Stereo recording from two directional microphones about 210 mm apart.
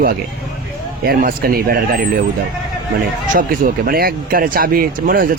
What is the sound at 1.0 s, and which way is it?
Speech, 45° right (ahead or behind).